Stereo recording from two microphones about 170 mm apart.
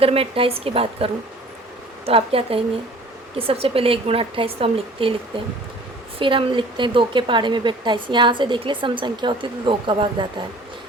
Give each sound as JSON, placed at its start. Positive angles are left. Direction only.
{"t": 0.0, "sound": "a woman's voice", "side_deg": -35}
{"t": 6.1, "sound": "a woman's voice", "side_deg": -30}